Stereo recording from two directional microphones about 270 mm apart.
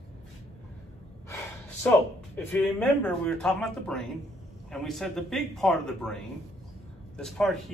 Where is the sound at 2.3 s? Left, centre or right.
Centre.